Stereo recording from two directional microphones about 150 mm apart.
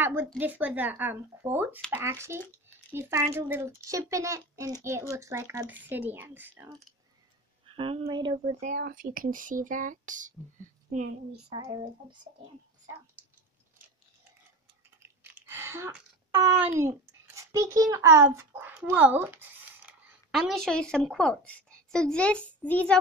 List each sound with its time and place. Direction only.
0.0 s a woman's voice: 15° right (ahead or behind)
7.6 s a woman's voice: 35° right (ahead or behind)
8.5 s speech: 55° right (ahead or behind)
11.5 s speech: 30° right (ahead or behind)
15.0 s speech: 15° right (ahead or behind); by 22.9 s 10° left (ahead or behind)